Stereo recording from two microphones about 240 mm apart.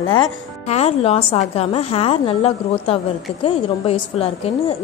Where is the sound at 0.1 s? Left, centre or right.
Left.